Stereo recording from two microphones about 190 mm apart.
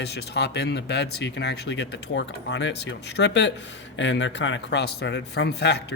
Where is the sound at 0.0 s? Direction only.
60° left (ahead or behind).